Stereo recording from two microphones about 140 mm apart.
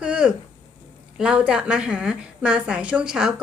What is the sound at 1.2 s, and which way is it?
A woman's voice, 5° right (ahead or behind).